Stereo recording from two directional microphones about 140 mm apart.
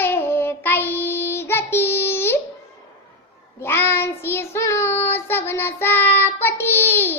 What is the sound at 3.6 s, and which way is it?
Child singing, 15° left (ahead or behind).